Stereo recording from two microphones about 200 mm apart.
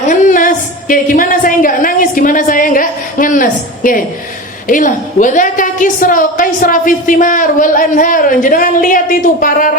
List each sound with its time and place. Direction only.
0.1 s a woman's voice: 40° left (ahead or behind)